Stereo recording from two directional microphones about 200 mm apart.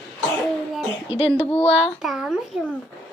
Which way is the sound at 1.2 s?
30° left (ahead or behind).